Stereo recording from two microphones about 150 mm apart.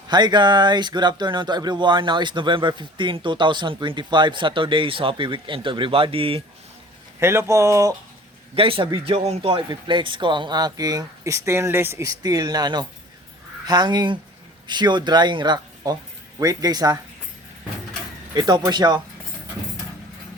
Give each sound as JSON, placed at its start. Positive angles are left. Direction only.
{"t": 0.1, "sound": "a man's voice", "side_deg": -30}
{"t": 7.2, "sound": "speech", "side_deg": -15}
{"t": 8.5, "sound": "a man's voice", "side_deg": -40}
{"t": 18.3, "sound": "speech", "side_deg": -25}